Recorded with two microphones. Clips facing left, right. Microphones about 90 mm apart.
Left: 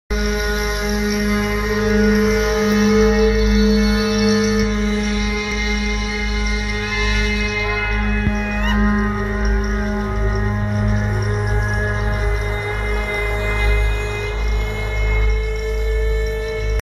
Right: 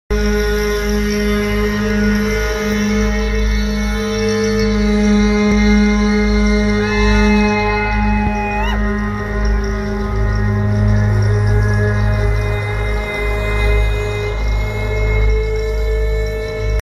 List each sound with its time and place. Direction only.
0.2 s music: 5° left (ahead or behind)
3.9 s music: 40° right (ahead or behind)
4.3 s music: centre (ahead or behind); by 7.6 s 30° right (ahead or behind)